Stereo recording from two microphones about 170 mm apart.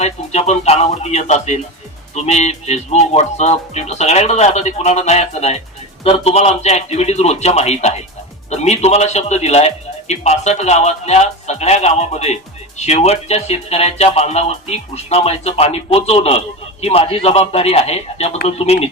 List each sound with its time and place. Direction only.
0.0 s a man's voice: 40° left (ahead or behind)